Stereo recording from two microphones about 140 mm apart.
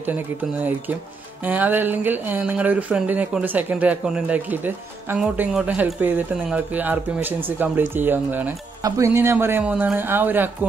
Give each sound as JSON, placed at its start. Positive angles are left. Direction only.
{"t": 1.4, "sound": "speech", "side_deg": -10}